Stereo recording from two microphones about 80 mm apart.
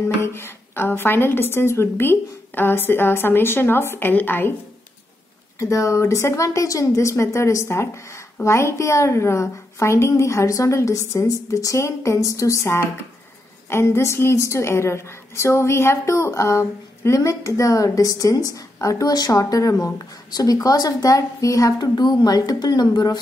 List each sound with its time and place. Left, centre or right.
0.2 s a woman's voice: left
5.6 s a woman's voice: left